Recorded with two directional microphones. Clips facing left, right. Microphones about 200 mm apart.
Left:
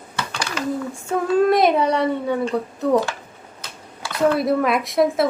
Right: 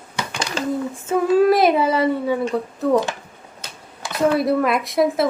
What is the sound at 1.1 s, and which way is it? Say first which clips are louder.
Speech: right 2 dB; 5° right (ahead or behind).